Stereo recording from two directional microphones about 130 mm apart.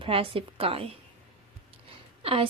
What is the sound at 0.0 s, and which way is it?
Speech, 45° right (ahead or behind).